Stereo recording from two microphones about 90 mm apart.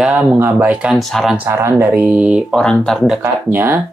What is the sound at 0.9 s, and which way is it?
Speech, centre (ahead or behind).